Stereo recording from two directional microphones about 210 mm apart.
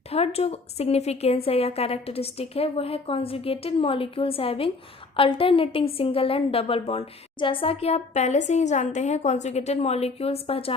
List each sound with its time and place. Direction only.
0.1 s a woman's voice: 30° left (ahead or behind)